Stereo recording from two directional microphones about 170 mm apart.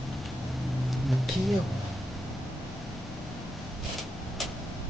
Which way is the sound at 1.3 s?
Centre (ahead or behind).